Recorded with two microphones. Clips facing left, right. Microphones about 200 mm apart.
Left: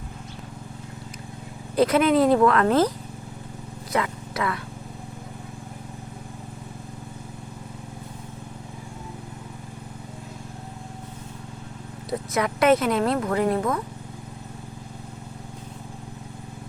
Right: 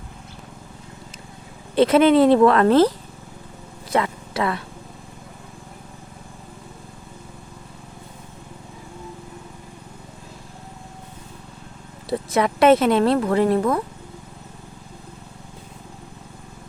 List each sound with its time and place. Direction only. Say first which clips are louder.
1.7 s speech: right 4 dB; 25° right (ahead or behind)
3.9 s speech: right 4 dB; 30° right (ahead or behind)
12.3 s speech: right 4 dB; 25° right (ahead or behind)